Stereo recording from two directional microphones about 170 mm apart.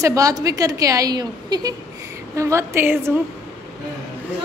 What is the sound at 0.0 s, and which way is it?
A woman's voice, 20° right (ahead or behind).